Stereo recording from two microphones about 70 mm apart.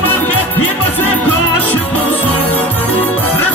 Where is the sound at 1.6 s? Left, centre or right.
Left.